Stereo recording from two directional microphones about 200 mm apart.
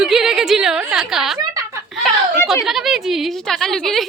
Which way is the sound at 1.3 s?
20° right (ahead or behind).